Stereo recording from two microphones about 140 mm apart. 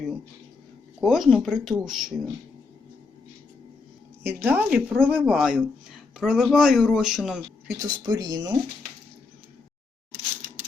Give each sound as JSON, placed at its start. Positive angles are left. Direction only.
{"t": 1.0, "sound": "speech", "side_deg": 0}
{"t": 4.2, "sound": "speech", "side_deg": -15}
{"t": 7.7, "sound": "speech", "side_deg": -30}